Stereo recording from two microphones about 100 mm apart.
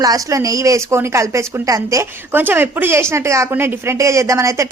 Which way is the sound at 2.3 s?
20° right (ahead or behind).